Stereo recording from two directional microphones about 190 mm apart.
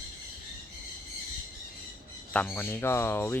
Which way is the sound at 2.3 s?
10° left (ahead or behind).